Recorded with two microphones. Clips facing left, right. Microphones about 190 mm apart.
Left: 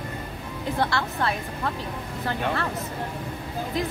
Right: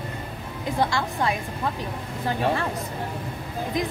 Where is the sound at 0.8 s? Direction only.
15° right (ahead or behind).